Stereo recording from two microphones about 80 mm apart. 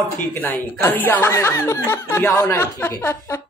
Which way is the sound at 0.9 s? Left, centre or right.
Left.